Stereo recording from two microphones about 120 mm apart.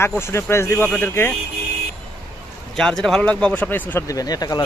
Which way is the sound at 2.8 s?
5° left (ahead or behind).